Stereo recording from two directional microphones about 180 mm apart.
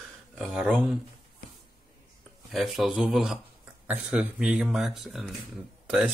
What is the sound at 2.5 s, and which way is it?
Speech, centre (ahead or behind).